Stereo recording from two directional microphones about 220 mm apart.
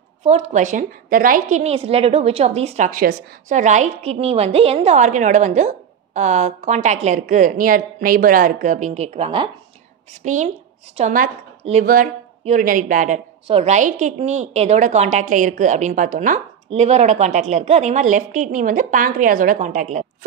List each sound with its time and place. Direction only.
0.2 s a woman's voice: 30° right (ahead or behind)